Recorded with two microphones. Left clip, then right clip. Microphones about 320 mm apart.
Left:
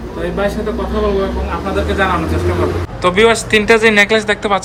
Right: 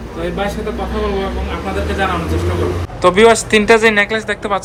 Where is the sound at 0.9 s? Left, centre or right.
Centre.